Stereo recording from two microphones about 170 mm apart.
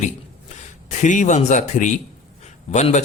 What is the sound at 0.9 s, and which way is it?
Speech, 50° left (ahead or behind).